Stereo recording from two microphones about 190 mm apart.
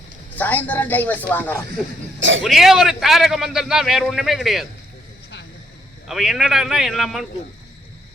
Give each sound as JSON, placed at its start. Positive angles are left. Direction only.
{"t": 0.3, "sound": "a man's voice", "side_deg": 10}
{"t": 6.1, "sound": "a man's voice", "side_deg": 0}